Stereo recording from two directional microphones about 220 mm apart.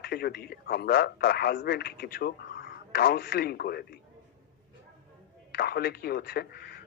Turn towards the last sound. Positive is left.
turn(degrees=45)  # may be behind; listen again after turning